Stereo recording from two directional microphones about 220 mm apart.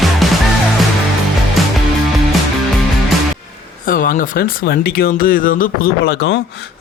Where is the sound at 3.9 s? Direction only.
40° left (ahead or behind).